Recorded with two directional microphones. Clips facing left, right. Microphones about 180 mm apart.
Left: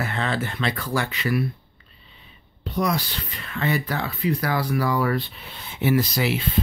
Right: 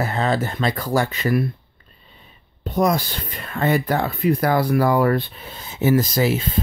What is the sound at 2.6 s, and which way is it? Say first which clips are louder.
Speech: right 5 dB; 45° right (ahead or behind).